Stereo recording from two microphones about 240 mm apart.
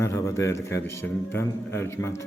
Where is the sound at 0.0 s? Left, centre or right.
Centre.